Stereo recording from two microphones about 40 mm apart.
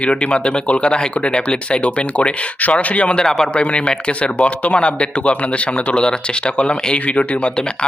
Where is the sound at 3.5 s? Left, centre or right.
Left.